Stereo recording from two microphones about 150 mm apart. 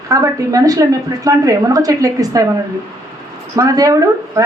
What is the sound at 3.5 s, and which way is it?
Speech, 25° right (ahead or behind).